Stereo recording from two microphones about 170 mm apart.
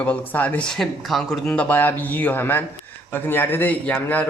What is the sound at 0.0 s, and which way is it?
Speech, 10° left (ahead or behind).